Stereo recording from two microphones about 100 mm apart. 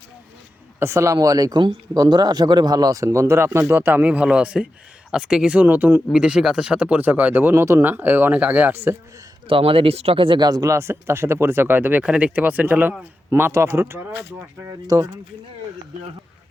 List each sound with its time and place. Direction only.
0.8 s speech: 30° right (ahead or behind)
9.5 s speech: 65° right (ahead or behind); by 10.7 s 40° right (ahead or behind)
10.7 s speech: 25° right (ahead or behind)